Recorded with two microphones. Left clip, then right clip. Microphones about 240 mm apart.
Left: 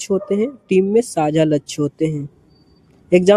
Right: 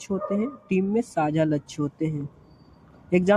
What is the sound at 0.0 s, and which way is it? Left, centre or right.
Speech, left.